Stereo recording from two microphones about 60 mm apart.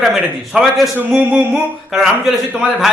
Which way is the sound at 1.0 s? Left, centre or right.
Right.